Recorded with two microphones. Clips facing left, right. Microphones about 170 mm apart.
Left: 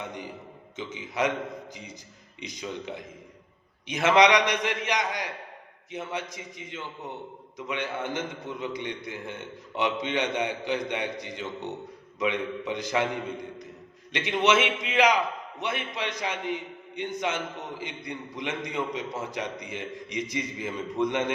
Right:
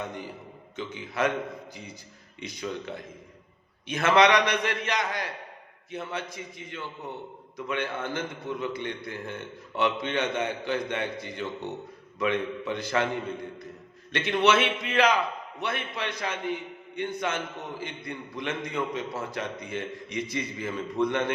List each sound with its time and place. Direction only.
0.8 s a man's voice: 20° left (ahead or behind)
2.4 s a man's voice: 20° left (ahead or behind)